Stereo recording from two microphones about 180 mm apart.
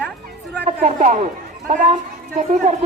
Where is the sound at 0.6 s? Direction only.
40° right (ahead or behind).